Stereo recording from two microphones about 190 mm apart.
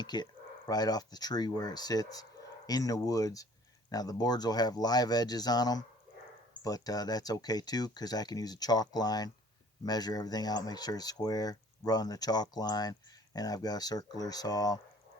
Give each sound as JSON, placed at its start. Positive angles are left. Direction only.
{"t": 0.0, "sound": "speech", "side_deg": 20}